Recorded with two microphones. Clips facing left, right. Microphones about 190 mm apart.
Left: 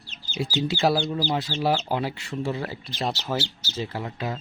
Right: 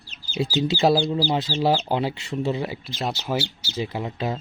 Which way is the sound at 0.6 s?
20° right (ahead or behind).